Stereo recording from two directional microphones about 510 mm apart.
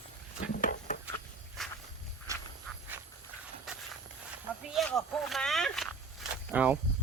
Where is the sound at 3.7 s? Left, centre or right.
Centre.